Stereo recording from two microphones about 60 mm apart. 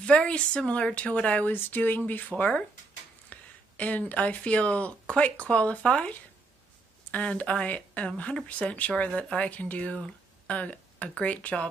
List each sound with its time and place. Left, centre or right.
0.0 s a woman's voice: centre
1.5 s a woman's voice: left